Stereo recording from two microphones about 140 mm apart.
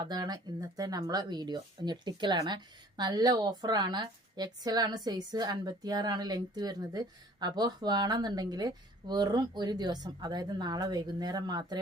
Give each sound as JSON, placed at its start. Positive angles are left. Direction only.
{"t": 0.0, "sound": "speech", "side_deg": -30}